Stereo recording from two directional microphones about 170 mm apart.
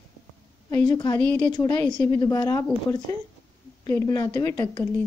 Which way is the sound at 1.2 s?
5° left (ahead or behind).